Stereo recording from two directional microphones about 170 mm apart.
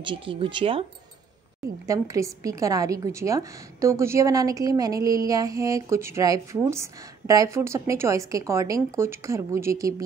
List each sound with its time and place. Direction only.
0.0 s speech: 30° right (ahead or behind)
1.9 s a woman's voice: 20° right (ahead or behind)